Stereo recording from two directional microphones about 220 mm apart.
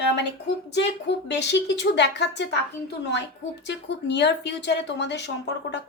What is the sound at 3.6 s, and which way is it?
Speech, 50° left (ahead or behind).